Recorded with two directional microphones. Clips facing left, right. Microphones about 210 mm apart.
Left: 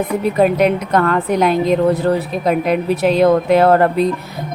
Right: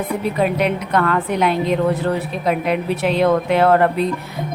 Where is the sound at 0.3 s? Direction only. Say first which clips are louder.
Left 6 dB; 45° left (ahead or behind).